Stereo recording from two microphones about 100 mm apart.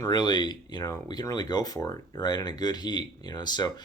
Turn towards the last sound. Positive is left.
turn(degrees=45)  # may be behind; listen again after turning